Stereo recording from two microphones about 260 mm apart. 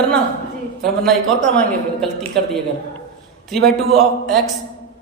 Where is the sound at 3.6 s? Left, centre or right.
Centre.